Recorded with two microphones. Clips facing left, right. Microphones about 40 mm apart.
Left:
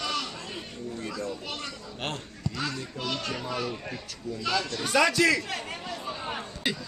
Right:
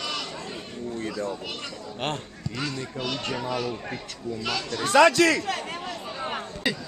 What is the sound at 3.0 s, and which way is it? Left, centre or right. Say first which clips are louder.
Speech: right 2 dB; right.